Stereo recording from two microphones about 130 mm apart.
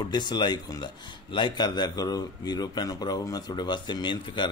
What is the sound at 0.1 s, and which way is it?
Speech, 35° left (ahead or behind).